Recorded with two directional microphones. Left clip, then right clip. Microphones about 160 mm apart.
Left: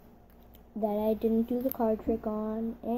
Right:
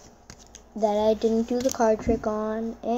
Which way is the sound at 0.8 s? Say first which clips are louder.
Right 7 dB; 5° left (ahead or behind).